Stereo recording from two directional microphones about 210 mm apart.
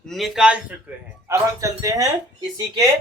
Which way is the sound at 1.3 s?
15° right (ahead or behind).